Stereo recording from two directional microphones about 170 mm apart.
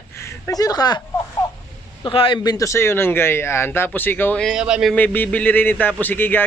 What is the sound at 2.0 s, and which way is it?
Speech, 30° left (ahead or behind).